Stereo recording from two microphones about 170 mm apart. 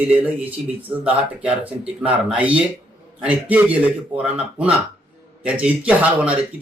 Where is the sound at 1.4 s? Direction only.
5° right (ahead or behind).